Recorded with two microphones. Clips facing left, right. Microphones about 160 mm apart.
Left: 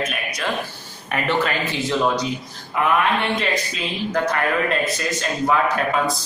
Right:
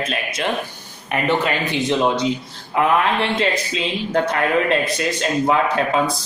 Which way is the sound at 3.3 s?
30° right (ahead or behind).